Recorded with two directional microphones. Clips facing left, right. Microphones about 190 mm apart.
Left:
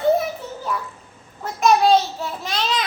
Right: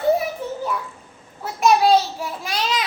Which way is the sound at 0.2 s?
10° right (ahead or behind).